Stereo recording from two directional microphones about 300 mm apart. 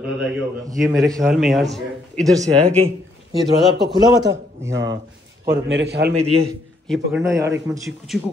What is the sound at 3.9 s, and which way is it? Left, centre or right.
Speech, centre.